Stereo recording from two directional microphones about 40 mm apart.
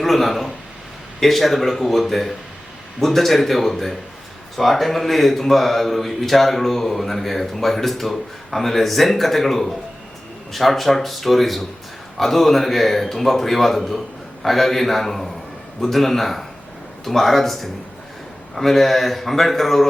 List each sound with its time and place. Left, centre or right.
0.0 s speech: centre